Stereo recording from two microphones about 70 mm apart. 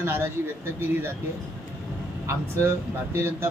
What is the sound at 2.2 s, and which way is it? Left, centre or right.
A man's voice, right.